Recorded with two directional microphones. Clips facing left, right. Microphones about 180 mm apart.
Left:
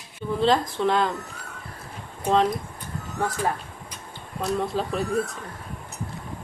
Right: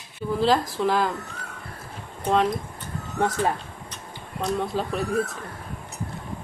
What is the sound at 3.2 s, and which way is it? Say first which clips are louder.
Speech: right 3 dB; 25° right (ahead or behind).